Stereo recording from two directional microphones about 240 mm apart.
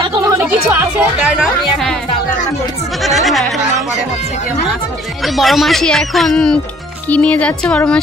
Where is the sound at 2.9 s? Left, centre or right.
Centre.